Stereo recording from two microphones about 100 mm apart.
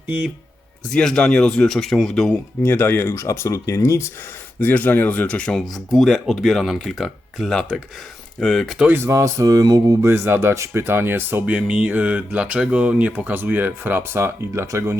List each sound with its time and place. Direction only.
0.9 s speech: 5° left (ahead or behind)
2.6 s speech: 20° left (ahead or behind)
4.6 s speech: 20° left (ahead or behind); by 8.8 s centre (ahead or behind)
8.8 s speech: 20° right (ahead or behind)
11.5 s speech: 10° right (ahead or behind); by 14.9 s 30° right (ahead or behind)